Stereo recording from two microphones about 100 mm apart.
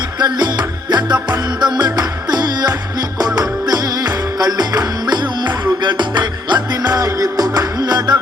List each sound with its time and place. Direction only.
0.2 s music: 45° right (ahead or behind)